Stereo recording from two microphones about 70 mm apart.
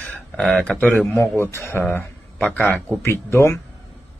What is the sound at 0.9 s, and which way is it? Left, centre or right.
Speech, left.